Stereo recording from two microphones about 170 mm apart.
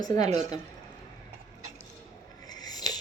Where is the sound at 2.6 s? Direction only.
20° left (ahead or behind).